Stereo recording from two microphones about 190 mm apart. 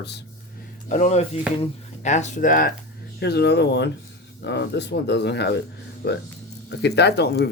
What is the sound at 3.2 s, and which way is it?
Speech, 60° left (ahead or behind).